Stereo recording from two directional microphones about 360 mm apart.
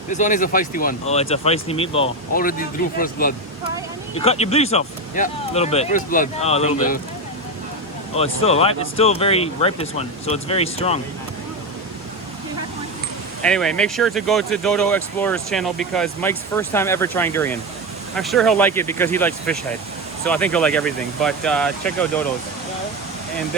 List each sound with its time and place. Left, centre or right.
0.1 s speech: left
8.1 s speech: centre
13.4 s speech: centre